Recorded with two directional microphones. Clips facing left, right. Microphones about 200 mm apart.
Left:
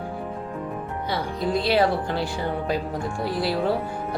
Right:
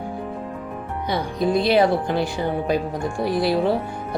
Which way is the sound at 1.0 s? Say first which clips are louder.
Right 5 dB; 15° right (ahead or behind).